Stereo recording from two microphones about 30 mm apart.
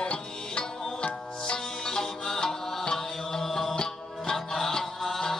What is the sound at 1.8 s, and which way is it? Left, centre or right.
Music, centre.